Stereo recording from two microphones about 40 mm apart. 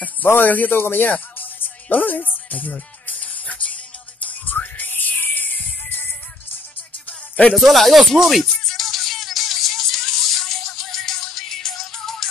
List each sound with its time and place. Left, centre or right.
0.4 s music: left
4.8 s music: left
7.1 s music: left
7.5 s speech: centre
8.6 s music: centre